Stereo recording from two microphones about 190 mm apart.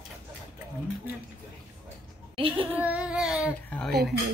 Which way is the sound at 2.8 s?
5° right (ahead or behind).